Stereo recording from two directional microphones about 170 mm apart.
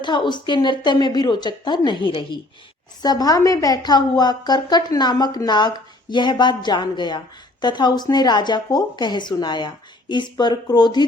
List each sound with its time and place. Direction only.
0.0 s a woman's voice: 25° left (ahead or behind)